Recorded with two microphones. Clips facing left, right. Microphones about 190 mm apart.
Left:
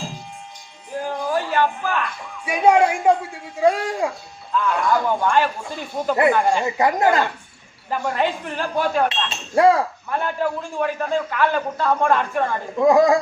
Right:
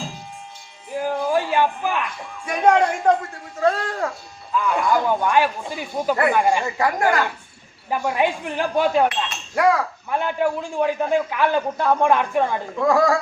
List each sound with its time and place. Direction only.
0.9 s music: 10° right (ahead or behind)
1.3 s a man's voice: 15° right (ahead or behind)
2.4 s a man's voice: 10° left (ahead or behind)
4.5 s a man's voice: 10° right (ahead or behind)
6.6 s speech: 20° left (ahead or behind)
7.9 s a man's voice: 10° right (ahead or behind)
9.0 s chink: 25° left (ahead or behind)
10.1 s a man's voice: 15° right (ahead or behind)
12.8 s speech: 20° left (ahead or behind)